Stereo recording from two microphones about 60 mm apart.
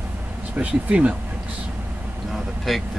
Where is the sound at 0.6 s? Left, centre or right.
Right.